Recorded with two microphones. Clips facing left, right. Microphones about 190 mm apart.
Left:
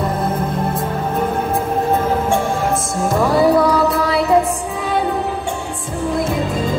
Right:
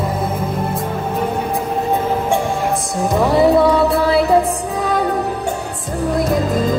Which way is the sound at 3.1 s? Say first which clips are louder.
Right 1 dB; 20° right (ahead or behind).